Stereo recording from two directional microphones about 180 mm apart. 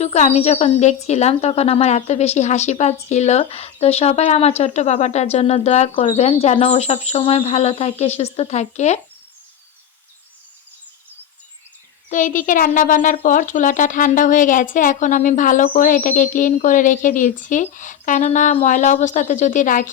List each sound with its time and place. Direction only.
0.0 s speech: 35° left (ahead or behind)
12.0 s speech: 45° left (ahead or behind)